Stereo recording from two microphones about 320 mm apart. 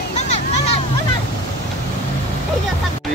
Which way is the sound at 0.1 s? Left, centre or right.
Left.